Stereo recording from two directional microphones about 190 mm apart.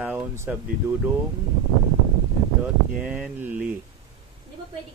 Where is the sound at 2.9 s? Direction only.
5° right (ahead or behind).